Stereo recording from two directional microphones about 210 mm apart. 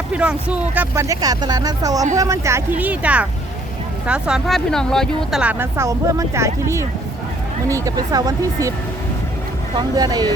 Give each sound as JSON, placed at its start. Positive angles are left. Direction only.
{"t": 0.1, "sound": "speech", "side_deg": -5}
{"t": 9.7, "sound": "speech", "side_deg": -20}